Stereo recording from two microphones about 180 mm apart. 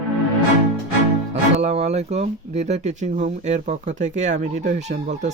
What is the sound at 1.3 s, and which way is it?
Speech, 35° right (ahead or behind).